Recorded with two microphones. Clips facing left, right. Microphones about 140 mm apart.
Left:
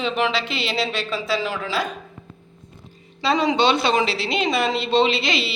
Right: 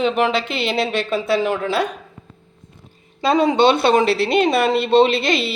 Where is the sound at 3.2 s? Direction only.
50° right (ahead or behind).